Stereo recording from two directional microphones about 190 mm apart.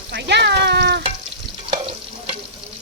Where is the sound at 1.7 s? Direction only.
30° right (ahead or behind).